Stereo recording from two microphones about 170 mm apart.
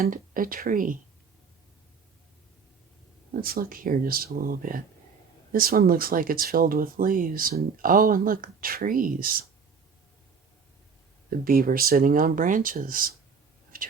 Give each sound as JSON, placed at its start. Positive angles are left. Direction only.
{"t": 0.0, "sound": "speech", "side_deg": -55}
{"t": 3.4, "sound": "speech", "side_deg": -60}
{"t": 11.3, "sound": "speech", "side_deg": -60}
{"t": 13.7, "sound": "whispering", "side_deg": -55}